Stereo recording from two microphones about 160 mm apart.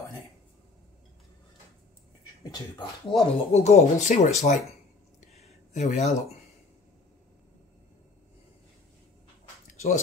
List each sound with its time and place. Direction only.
2.4 s speech: 20° left (ahead or behind)
3.1 s speech: 45° left (ahead or behind)
5.7 s speech: 45° left (ahead or behind)
9.7 s a sound: 45° left (ahead or behind)